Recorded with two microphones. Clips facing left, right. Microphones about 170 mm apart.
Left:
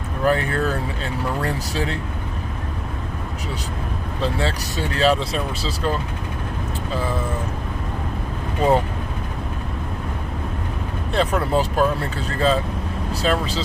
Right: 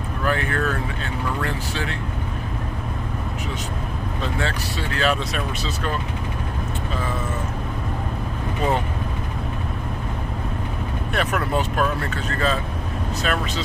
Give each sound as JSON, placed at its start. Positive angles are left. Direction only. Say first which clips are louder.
{"t": 0.2, "sound": "speech", "louder": "left 4 dB", "side_deg": 35}
{"t": 4.2, "sound": "speech", "louder": "left 4 dB", "side_deg": 35}
{"t": 11.1, "sound": "speech", "louder": "left 4 dB", "side_deg": 30}